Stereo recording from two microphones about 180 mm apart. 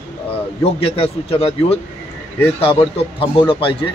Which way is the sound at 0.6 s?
30° left (ahead or behind).